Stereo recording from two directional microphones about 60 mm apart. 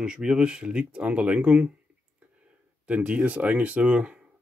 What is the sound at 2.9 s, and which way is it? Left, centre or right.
Speech, right.